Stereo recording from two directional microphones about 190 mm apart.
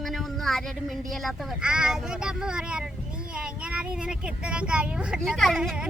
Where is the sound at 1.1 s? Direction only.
Centre (ahead or behind).